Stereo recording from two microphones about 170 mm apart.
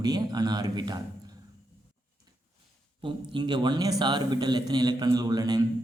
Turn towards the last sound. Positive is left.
turn(degrees=-25)  # may be behind; listen again after turning